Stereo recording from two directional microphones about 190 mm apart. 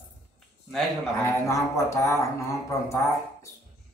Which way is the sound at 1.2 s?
15° left (ahead or behind).